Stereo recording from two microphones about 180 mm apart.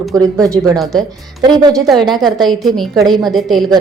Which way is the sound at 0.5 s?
20° right (ahead or behind).